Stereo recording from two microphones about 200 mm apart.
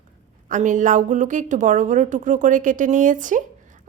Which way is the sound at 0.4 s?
40° right (ahead or behind).